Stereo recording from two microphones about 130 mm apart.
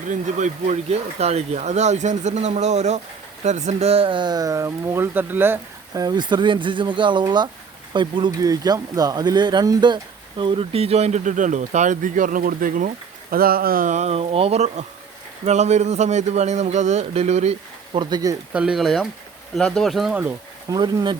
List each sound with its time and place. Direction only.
0.1 s speech: 70° right (ahead or behind); by 6.0 s 15° right (ahead or behind)
6.0 s speech: 35° right (ahead or behind); by 17.6 s 55° right (ahead or behind)
17.9 s speech: 35° right (ahead or behind)
18.5 s speech: 5° right (ahead or behind)
20.7 s speech: 30° right (ahead or behind)